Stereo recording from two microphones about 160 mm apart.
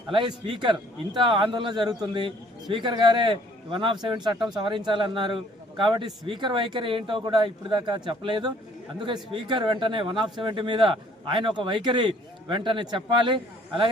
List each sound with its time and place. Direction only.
0.1 s a man's voice: 30° right (ahead or behind)